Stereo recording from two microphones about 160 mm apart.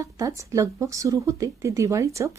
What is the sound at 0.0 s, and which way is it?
A woman's voice, 20° right (ahead or behind).